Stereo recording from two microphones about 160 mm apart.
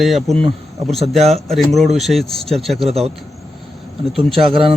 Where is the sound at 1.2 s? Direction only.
40° right (ahead or behind).